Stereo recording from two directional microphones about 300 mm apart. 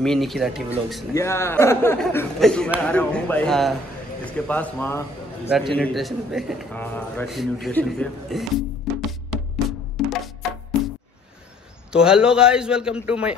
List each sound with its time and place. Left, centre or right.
0.0 s a man's voice: centre
8.9 s music: centre
11.9 s a man's voice: centre